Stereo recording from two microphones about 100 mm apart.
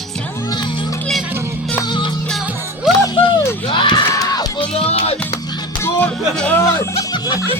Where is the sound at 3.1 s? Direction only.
55° left (ahead or behind).